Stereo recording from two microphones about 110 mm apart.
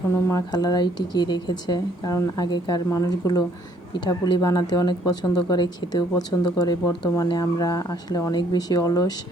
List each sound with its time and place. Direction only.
0.1 s speech: 30° left (ahead or behind)